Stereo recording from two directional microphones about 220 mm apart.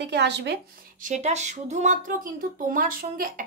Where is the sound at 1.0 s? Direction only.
30° right (ahead or behind).